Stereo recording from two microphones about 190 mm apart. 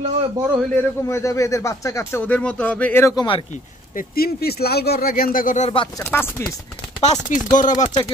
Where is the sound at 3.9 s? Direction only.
50° left (ahead or behind).